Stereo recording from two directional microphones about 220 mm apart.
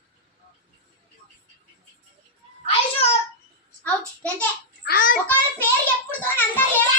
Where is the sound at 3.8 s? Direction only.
5° left (ahead or behind).